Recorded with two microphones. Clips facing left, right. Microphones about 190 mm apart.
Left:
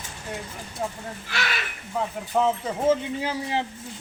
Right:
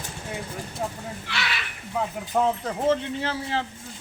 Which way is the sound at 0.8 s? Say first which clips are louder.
Left 2 dB; centre (ahead or behind).